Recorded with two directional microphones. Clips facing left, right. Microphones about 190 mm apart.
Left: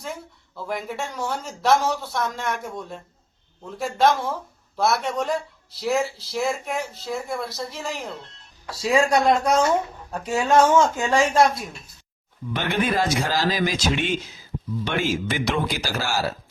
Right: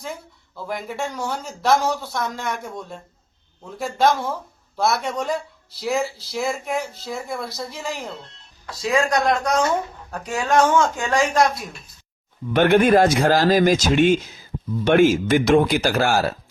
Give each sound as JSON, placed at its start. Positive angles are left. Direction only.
{"t": 0.5, "sound": "speech", "side_deg": 0}
{"t": 12.5, "sound": "speech", "side_deg": -55}